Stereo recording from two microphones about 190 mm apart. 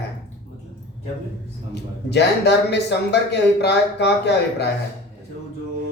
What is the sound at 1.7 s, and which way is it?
A man's voice, 60° left (ahead or behind).